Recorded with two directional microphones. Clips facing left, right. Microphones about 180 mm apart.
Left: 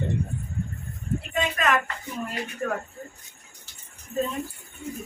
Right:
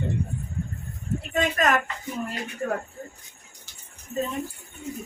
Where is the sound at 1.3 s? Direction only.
40° right (ahead or behind).